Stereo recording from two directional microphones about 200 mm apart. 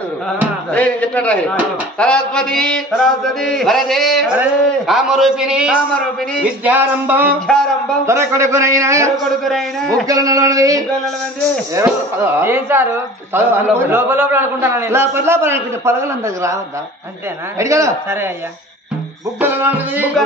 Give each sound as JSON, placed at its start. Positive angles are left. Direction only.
{"t": 0.7, "sound": "a man's voice", "side_deg": 5}
{"t": 2.0, "sound": "mantra", "side_deg": 5}
{"t": 6.6, "sound": "a man's voice", "side_deg": -10}
{"t": 7.4, "sound": "mantra", "side_deg": 5}
{"t": 8.0, "sound": "a man's voice", "side_deg": -15}
{"t": 9.4, "sound": "mantra", "side_deg": 0}
{"t": 10.0, "sound": "a man's voice", "side_deg": -15}
{"t": 17.6, "sound": "a man's voice", "side_deg": -15}
{"t": 19.4, "sound": "a man's voice", "side_deg": -10}